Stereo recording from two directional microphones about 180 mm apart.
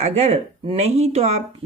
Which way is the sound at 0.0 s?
35° right (ahead or behind).